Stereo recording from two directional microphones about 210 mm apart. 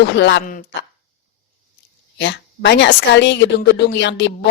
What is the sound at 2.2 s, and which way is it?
A woman's voice, 55° left (ahead or behind).